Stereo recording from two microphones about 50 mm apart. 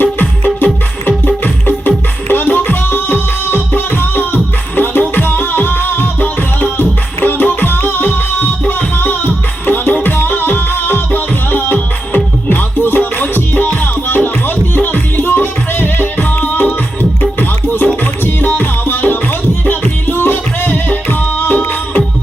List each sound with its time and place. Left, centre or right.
0.0 s music: left